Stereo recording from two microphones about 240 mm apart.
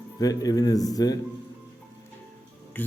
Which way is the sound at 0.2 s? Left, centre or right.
Centre.